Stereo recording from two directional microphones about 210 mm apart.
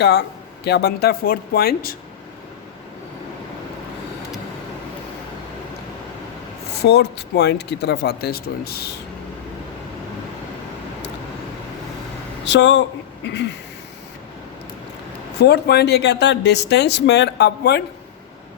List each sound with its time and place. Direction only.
0.0 s speech: 50° left (ahead or behind)
6.8 s speech: 50° left (ahead or behind)
12.5 s speech: 55° left (ahead or behind)
15.4 s speech: 50° left (ahead or behind)